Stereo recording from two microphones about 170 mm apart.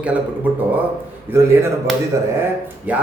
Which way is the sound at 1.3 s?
15° right (ahead or behind).